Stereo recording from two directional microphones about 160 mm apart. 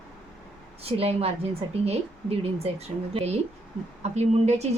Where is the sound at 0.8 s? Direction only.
40° right (ahead or behind).